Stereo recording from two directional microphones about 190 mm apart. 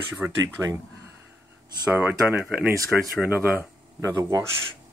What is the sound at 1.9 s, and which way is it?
Speech, 10° right (ahead or behind).